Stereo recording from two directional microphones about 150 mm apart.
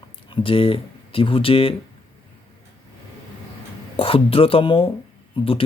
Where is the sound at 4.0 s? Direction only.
40° left (ahead or behind).